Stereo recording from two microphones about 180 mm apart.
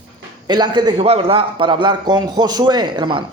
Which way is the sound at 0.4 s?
25° right (ahead or behind).